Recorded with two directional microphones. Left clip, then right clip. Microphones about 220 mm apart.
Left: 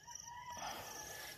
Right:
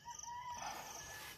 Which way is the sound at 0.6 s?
10° left (ahead or behind).